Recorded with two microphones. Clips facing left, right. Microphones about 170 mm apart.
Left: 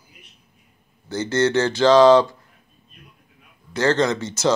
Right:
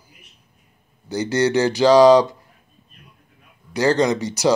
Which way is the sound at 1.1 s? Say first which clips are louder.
Right 1 dB; 15° right (ahead or behind).